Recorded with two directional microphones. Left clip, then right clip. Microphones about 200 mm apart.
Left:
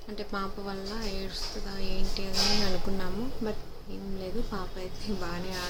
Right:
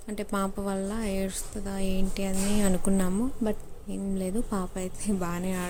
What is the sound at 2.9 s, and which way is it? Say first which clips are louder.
Speech: right 7 dB; 70° right (ahead or behind).